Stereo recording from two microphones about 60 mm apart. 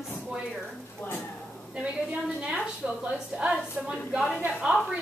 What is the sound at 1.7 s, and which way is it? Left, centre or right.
A woman's voice, centre.